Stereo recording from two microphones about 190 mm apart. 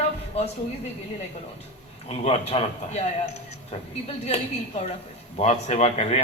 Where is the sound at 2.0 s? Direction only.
35° left (ahead or behind).